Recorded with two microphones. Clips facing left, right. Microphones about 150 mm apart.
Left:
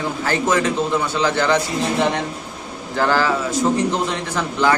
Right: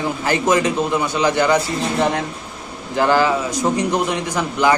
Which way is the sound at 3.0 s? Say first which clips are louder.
Right 2 dB; 15° right (ahead or behind).